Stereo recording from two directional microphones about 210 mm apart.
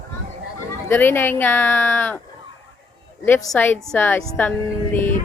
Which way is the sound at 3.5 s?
10° left (ahead or behind).